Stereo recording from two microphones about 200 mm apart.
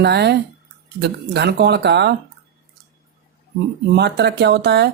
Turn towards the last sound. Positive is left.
turn(degrees=-60)  # may be behind; listen again after turning